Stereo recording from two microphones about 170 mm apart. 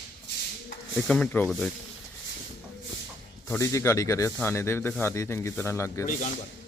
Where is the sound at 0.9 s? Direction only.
10° left (ahead or behind).